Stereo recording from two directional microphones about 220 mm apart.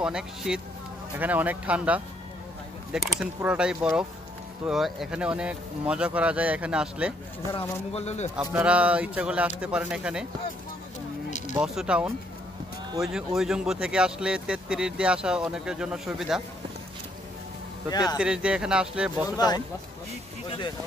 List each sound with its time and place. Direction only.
0.0 s speech: 5° right (ahead or behind)
7.9 s speech: 30° left (ahead or behind)
8.4 s speech: 5° right (ahead or behind)
11.2 s a sound: 35° left (ahead or behind)
11.6 s speech: 5° right (ahead or behind)
17.8 s speech: 20° left (ahead or behind)
18.1 s speech: 5° right (ahead or behind)
19.2 s speech: 20° left (ahead or behind)